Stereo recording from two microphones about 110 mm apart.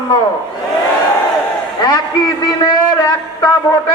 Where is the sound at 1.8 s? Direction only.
35° left (ahead or behind).